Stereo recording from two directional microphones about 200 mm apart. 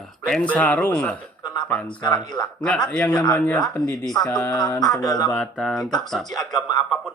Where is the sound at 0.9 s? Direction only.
5° left (ahead or behind).